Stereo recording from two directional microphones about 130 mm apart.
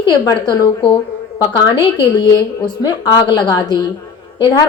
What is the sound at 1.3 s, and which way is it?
A woman's voice, 35° left (ahead or behind).